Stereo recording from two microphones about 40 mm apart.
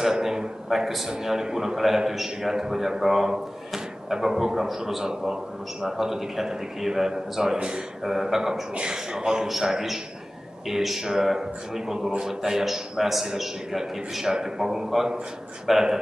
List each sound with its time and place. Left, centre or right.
0.0 s a man's voice: centre
7.5 s a man's voice: right
8.0 s a man's voice: centre
8.7 s a man's voice: centre